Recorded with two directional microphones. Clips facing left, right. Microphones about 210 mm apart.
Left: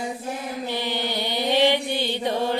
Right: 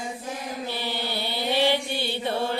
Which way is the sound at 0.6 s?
20° left (ahead or behind).